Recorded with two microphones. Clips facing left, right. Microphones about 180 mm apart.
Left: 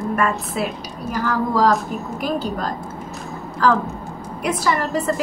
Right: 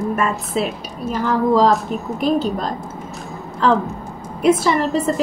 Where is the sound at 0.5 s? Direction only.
25° right (ahead or behind).